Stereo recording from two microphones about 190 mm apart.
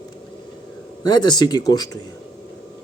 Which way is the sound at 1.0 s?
20° left (ahead or behind).